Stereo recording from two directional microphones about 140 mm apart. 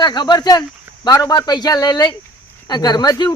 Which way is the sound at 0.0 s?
30° left (ahead or behind).